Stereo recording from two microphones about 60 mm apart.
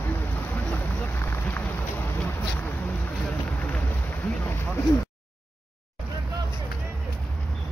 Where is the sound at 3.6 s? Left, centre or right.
Left.